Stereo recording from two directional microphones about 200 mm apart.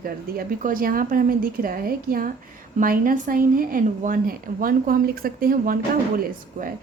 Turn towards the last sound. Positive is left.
turn(degrees=-45)  # may be behind; listen again after turning